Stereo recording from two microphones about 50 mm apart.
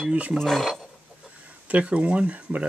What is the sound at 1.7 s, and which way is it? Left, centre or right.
Speech, right.